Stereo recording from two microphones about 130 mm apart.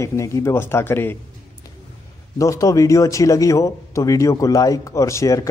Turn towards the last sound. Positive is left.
turn(degrees=25)  # may be behind; listen again after turning